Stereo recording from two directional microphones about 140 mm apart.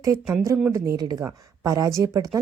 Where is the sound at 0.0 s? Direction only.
20° right (ahead or behind).